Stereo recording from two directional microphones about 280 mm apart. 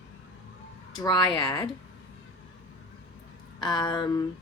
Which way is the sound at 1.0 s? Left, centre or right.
Centre.